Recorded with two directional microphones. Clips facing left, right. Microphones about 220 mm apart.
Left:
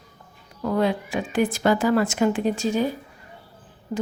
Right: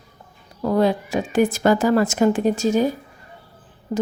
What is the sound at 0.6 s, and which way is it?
Speech, 40° right (ahead or behind).